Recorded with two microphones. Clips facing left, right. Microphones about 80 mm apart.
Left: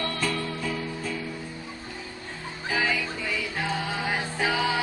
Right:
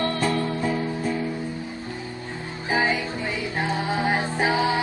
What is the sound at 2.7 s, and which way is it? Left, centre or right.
Music, right.